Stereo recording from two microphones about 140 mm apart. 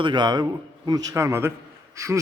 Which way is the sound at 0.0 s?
35° right (ahead or behind).